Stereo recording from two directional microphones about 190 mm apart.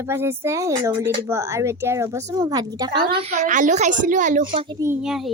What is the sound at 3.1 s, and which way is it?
A woman's voice, 30° right (ahead or behind).